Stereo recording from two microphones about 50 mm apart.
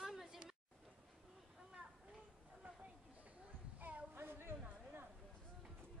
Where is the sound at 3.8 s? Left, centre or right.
Right.